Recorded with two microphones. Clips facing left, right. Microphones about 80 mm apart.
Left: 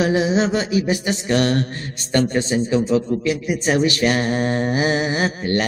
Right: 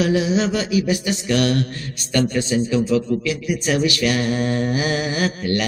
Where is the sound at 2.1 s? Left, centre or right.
Left.